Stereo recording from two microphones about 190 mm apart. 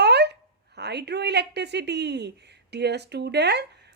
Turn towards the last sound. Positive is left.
turn(degrees=-60)  # may be behind; listen again after turning